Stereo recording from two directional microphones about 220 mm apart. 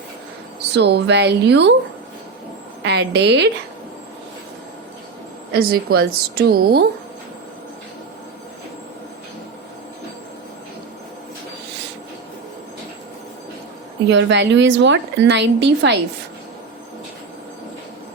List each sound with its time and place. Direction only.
0.8 s a woman's voice: 50° right (ahead or behind)
2.8 s a woman's voice: 50° right (ahead or behind)
5.5 s a woman's voice: 45° right (ahead or behind)
14.1 s a woman's voice: 55° right (ahead or behind)